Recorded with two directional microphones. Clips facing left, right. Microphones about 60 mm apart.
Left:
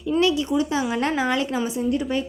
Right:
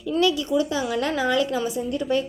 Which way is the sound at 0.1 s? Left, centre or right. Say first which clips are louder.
Left 1 dB; left.